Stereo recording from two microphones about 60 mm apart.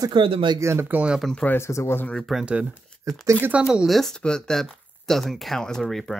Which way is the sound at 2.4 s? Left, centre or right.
Right.